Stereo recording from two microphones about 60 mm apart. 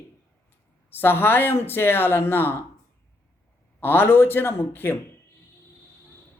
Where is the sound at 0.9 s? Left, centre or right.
Left.